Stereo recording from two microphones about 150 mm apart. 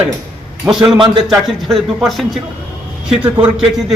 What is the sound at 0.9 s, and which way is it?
Speech, 30° right (ahead or behind).